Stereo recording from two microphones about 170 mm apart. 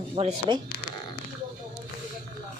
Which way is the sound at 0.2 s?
35° right (ahead or behind).